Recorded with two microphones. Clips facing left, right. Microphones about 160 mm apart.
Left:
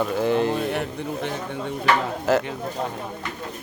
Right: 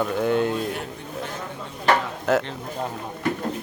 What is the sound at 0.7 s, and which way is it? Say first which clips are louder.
Speech: left 5 dB; 65° left (ahead or behind).